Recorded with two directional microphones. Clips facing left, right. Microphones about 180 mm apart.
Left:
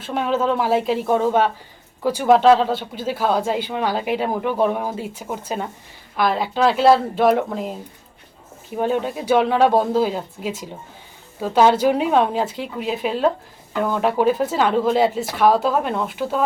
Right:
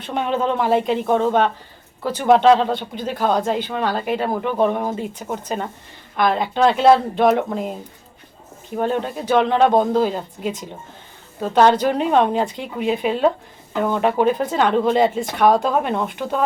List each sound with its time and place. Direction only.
0.0 s speech: 5° left (ahead or behind)